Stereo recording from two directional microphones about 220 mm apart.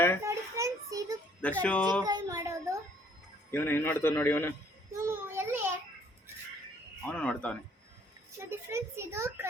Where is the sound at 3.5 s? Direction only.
10° left (ahead or behind).